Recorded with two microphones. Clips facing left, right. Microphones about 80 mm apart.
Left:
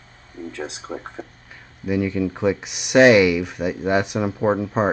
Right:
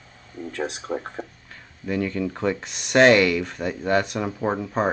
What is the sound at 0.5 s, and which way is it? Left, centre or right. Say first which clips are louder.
Speech: right 4 dB; right.